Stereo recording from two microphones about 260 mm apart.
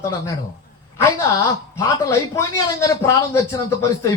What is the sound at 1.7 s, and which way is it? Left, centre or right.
Speech, centre.